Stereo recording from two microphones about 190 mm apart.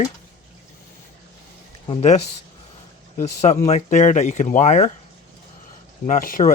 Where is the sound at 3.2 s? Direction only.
35° left (ahead or behind).